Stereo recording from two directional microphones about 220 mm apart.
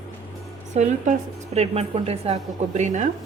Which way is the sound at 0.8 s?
30° right (ahead or behind).